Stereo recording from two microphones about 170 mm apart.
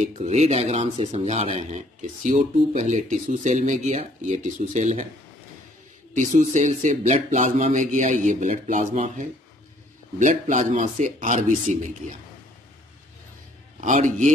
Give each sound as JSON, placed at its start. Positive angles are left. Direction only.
{"t": 0.0, "sound": "speech", "side_deg": -40}
{"t": 6.1, "sound": "speech", "side_deg": -45}
{"t": 13.7, "sound": "speech", "side_deg": -45}